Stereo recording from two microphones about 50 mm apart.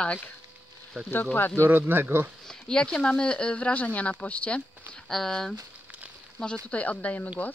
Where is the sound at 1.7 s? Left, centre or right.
Right.